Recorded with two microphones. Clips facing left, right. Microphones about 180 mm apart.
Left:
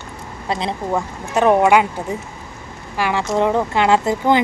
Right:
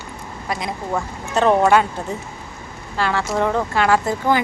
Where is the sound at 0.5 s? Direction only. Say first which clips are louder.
Left 3 dB; 30° left (ahead or behind).